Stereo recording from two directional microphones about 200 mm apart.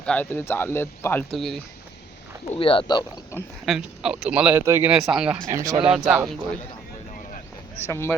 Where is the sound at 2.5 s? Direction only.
25° left (ahead or behind).